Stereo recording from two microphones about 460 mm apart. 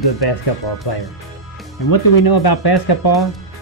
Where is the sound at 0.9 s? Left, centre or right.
Left.